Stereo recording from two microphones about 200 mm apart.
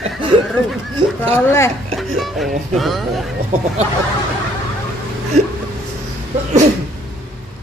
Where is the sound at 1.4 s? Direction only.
15° left (ahead or behind).